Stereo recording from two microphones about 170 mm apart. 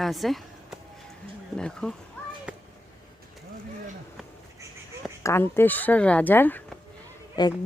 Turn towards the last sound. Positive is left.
turn(degrees=25)  # may be behind; listen again after turning